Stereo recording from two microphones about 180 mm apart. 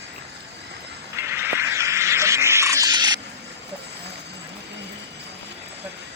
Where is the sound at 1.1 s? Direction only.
15° right (ahead or behind).